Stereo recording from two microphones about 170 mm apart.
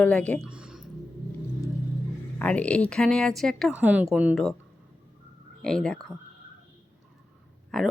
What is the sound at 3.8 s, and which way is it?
Speech, 10° right (ahead or behind).